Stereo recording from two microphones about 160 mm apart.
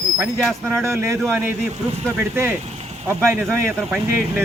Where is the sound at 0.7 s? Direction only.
15° right (ahead or behind).